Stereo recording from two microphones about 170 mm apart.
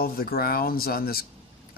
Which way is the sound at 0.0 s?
60° left (ahead or behind).